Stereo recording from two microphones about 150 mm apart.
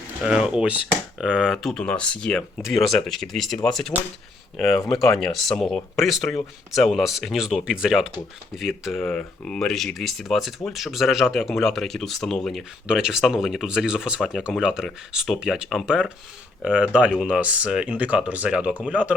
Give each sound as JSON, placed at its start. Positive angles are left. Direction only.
{"t": 0.2, "sound": "speech", "side_deg": -5}